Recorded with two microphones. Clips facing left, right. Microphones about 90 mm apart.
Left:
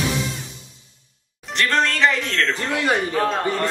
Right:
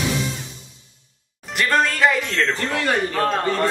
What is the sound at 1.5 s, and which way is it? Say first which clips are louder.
Speech: right 1 dB; 5° right (ahead or behind).